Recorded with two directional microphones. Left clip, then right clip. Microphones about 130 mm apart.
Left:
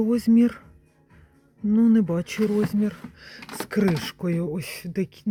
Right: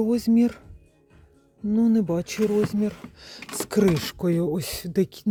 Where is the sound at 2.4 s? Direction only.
25° right (ahead or behind).